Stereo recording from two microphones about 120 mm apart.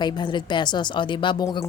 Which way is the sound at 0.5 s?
40° left (ahead or behind).